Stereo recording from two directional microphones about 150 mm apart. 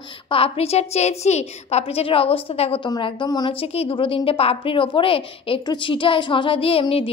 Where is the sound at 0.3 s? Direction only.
40° left (ahead or behind).